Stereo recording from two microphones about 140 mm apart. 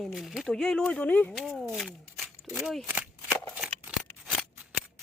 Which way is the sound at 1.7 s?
5° right (ahead or behind).